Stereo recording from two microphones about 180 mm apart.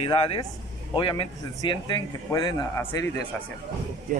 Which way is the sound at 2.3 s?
15° left (ahead or behind).